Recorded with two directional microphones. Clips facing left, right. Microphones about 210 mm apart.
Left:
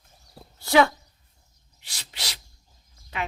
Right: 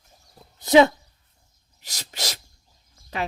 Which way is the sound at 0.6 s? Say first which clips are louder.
Right 4 dB; 20° right (ahead or behind).